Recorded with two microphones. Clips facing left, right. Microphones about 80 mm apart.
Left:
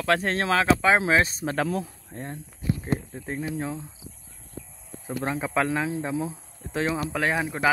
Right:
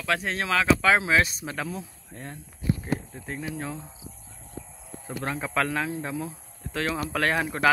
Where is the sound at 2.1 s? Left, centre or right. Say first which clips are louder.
Left 4 dB; left.